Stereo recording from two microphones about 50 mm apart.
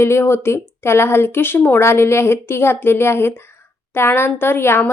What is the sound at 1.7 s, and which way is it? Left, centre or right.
A woman's voice, left.